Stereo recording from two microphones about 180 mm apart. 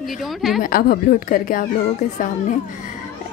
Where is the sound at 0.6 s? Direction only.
55° left (ahead or behind).